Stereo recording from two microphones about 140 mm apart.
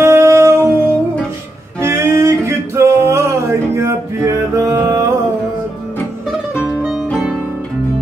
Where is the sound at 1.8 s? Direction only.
20° right (ahead or behind).